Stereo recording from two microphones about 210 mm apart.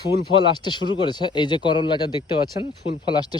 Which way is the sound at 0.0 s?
20° left (ahead or behind).